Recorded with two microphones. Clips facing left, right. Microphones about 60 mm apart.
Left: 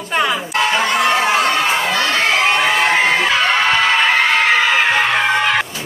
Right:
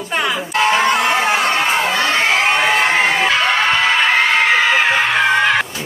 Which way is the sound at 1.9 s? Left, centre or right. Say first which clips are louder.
Even; right.